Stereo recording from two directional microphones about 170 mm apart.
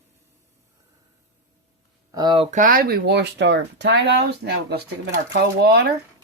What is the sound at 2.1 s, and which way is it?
Speech, 25° right (ahead or behind).